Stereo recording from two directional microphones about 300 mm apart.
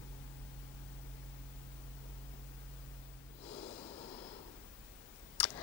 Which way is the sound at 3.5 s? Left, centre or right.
Centre.